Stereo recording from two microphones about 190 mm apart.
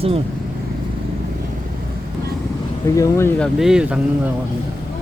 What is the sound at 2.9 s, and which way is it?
Speech, 15° left (ahead or behind).